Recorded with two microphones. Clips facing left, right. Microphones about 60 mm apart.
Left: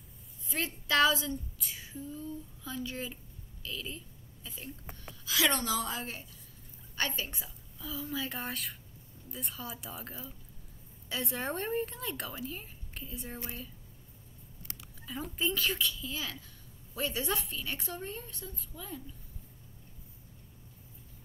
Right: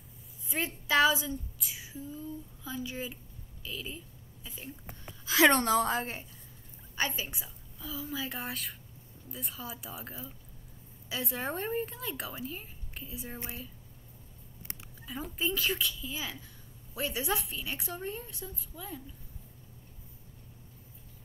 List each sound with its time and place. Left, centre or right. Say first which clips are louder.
0.5 s speech: right 1 dB; centre
5.2 s a sound: right 7 dB; right
5.5 s a woman's voice: right 7 dB; right
7.0 s a woman's voice: right 1 dB; centre
15.0 s speech: even; centre